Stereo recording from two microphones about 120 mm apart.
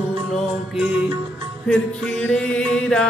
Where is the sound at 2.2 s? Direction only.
10° left (ahead or behind).